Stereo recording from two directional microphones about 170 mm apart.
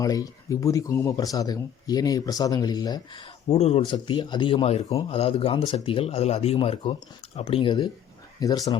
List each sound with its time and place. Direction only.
0.0 s speech: 20° left (ahead or behind)